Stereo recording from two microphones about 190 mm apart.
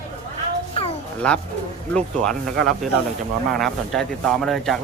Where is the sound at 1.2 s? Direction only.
5° left (ahead or behind).